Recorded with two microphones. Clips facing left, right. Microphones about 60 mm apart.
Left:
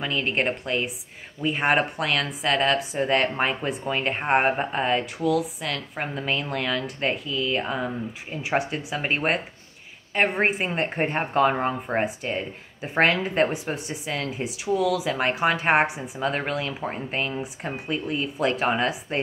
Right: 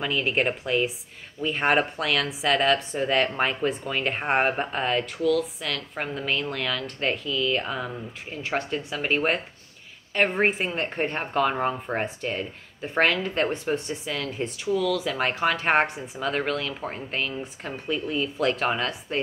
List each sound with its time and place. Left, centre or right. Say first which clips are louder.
0.0 s speech: even; centre
10.8 s speech: left 3 dB; centre
12.0 s speech: left 2 dB; centre